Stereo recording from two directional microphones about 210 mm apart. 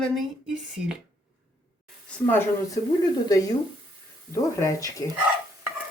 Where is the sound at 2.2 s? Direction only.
10° left (ahead or behind).